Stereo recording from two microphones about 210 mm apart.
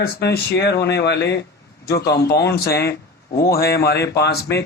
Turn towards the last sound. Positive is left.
turn(degrees=55)  # may be behind; listen again after turning